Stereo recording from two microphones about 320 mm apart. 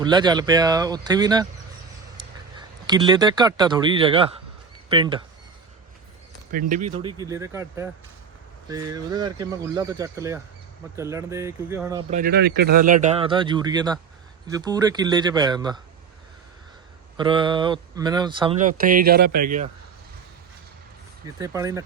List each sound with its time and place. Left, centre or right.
0.0 s a man's voice: centre
6.5 s speech: right
7.0 s speech: centre
12.1 s speech: right; by 15.8 s centre
17.2 s speech: centre
21.3 s speech: centre